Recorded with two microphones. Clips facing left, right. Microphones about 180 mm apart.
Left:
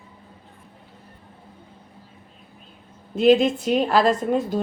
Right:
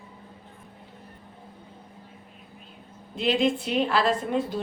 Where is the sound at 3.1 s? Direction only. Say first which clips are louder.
Left 7 dB; 45° left (ahead or behind).